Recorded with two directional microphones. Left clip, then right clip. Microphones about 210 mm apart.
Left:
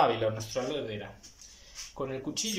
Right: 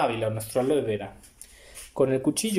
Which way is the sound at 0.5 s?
30° right (ahead or behind).